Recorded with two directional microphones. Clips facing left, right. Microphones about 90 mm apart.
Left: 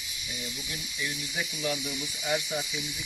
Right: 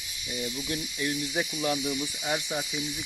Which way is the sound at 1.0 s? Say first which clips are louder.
Right 4 dB; 40° right (ahead or behind).